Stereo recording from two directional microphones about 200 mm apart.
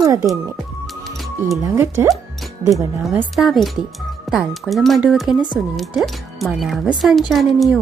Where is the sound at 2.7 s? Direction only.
Centre (ahead or behind).